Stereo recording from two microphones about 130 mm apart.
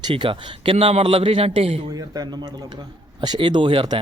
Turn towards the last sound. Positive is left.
turn(degrees=-40)  # may be behind; listen again after turning